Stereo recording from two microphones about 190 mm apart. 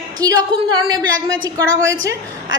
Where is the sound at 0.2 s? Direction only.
20° right (ahead or behind).